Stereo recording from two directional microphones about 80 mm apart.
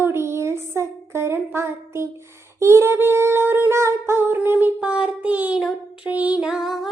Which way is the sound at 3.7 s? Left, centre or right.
Right.